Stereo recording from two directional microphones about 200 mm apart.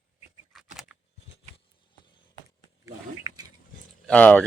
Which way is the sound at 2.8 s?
20° right (ahead or behind).